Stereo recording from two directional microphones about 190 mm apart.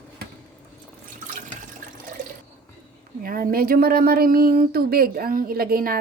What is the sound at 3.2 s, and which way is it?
Speech, 50° right (ahead or behind).